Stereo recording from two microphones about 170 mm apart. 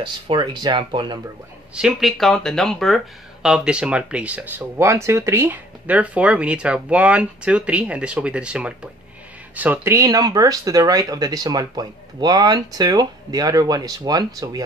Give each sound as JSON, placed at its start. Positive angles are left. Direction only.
{"t": 0.0, "sound": "speech", "side_deg": -25}
{"t": 1.8, "sound": "speech", "side_deg": 0}